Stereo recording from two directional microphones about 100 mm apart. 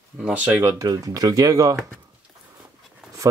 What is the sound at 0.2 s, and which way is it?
Speech, 15° right (ahead or behind).